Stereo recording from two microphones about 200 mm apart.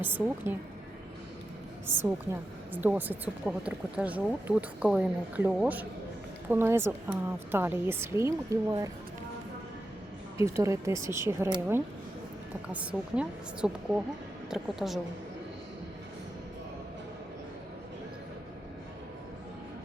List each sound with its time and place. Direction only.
0.5 s a woman's voice: 10° right (ahead or behind)
1.9 s a woman's voice: 10° right (ahead or behind)
10.3 s a woman's voice: 15° right (ahead or behind)